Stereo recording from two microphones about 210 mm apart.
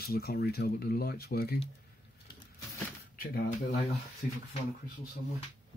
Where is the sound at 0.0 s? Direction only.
45° left (ahead or behind).